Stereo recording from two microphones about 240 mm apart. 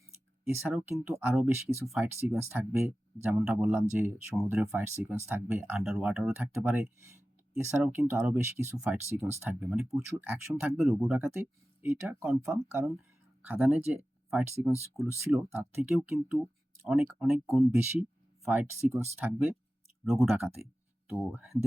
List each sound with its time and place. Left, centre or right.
0.4 s speech: centre
20.1 s speech: centre